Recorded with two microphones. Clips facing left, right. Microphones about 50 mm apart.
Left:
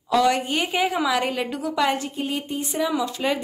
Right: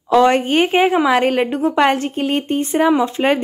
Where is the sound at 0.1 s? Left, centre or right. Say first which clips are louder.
Right 7 dB; right.